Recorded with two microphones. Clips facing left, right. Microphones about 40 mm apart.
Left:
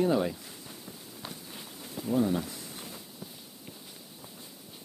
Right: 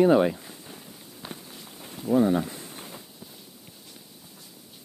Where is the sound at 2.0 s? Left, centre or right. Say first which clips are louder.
Right 6 dB; right.